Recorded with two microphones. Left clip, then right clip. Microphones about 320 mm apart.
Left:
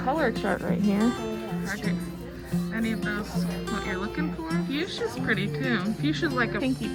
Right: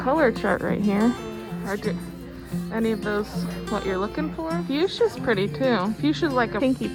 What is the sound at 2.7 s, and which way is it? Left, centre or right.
Speech, centre.